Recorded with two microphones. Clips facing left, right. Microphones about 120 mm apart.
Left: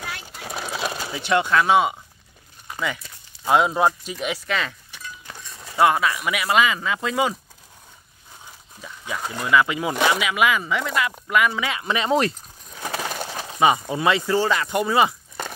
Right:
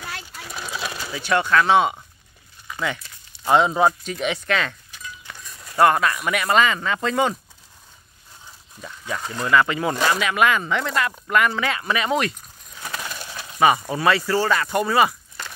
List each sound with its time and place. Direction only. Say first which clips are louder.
0.4 s bird: left 3 dB; 40° left (ahead or behind)
0.7 s sewing machine: left 2 dB; 45° left (ahead or behind)
1.0 s speech: even; 20° left (ahead or behind)
3.4 s speech: right 1 dB; 5° left (ahead or behind)
5.8 s speech: right 1 dB; 5° left (ahead or behind)
8.8 s speech: even; 10° left (ahead or behind); by 12.4 s 30° left (ahead or behind)
13.0 s bird: left 5 dB; 50° left (ahead or behind)
13.6 s speech: right 1 dB; 20° left (ahead or behind)